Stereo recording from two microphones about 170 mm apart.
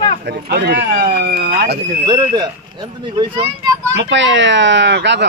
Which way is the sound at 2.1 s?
25° right (ahead or behind).